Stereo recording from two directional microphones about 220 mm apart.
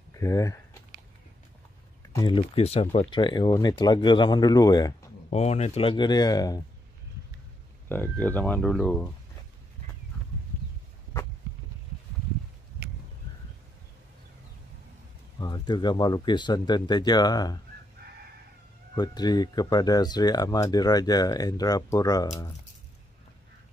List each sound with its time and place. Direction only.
0.1 s speech: 15° left (ahead or behind)
2.1 s speech: 20° left (ahead or behind)
5.3 s speech: 30° left (ahead or behind)
7.9 s speech: 10° left (ahead or behind)
15.3 s speech: 20° left (ahead or behind)
18.9 s speech: 20° left (ahead or behind)